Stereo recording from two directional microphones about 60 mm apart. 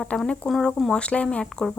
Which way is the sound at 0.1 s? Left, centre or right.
Centre.